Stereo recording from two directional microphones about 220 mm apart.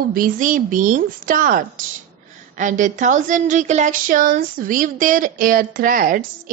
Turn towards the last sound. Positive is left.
turn(degrees=-40)  # may be behind; listen again after turning